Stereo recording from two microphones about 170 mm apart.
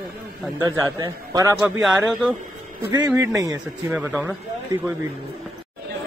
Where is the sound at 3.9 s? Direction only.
5° right (ahead or behind).